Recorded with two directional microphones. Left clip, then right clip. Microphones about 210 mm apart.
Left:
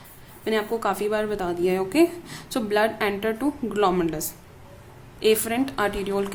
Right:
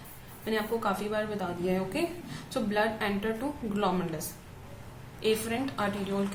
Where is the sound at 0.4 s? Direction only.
45° left (ahead or behind).